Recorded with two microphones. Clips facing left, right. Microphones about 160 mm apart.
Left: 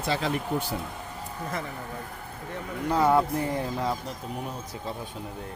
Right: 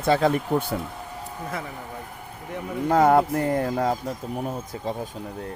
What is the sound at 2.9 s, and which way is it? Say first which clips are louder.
Speech: right 4 dB; 50° right (ahead or behind).